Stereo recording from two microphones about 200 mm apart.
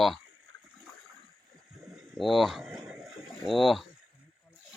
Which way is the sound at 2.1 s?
Centre (ahead or behind).